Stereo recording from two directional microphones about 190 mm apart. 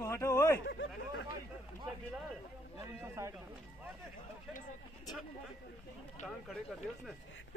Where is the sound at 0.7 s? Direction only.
75° left (ahead or behind).